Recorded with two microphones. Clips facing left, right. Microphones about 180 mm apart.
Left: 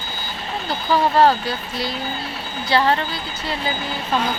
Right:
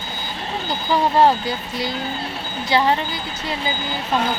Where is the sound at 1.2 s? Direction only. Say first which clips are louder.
Even; 20° right (ahead or behind).